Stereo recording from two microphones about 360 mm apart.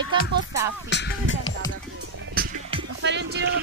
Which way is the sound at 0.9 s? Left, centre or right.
Left.